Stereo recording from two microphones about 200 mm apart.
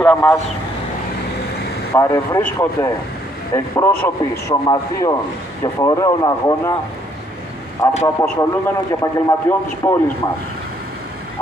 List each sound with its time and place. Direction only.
0.0 s a man's voice: 10° left (ahead or behind)
2.0 s a man's voice: 15° left (ahead or behind)
7.8 s a man's voice: 15° left (ahead or behind)